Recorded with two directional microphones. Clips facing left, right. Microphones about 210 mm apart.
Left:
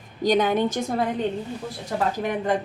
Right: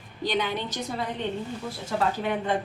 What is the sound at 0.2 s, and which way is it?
Speech, 45° left (ahead or behind).